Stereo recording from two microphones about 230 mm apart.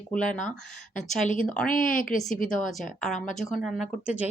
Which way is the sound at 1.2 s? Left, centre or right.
Left.